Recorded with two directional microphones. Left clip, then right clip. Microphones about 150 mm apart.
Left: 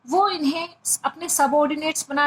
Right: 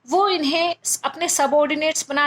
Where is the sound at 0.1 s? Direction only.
40° right (ahead or behind).